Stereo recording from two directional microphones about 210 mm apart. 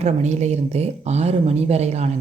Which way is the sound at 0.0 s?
30° right (ahead or behind).